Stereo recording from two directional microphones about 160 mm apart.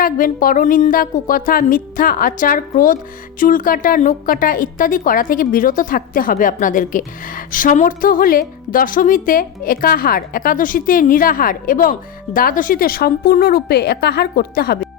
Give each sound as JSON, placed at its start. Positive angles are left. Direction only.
{"t": 0.0, "sound": "a woman's voice", "side_deg": 60}